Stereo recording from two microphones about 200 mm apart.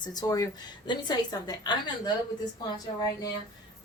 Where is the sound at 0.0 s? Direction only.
20° left (ahead or behind).